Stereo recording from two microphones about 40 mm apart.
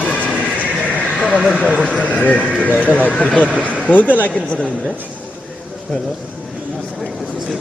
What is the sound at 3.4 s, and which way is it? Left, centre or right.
Neigh, left.